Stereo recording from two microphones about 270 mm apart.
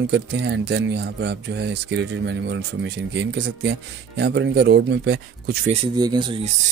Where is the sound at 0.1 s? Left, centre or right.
Right.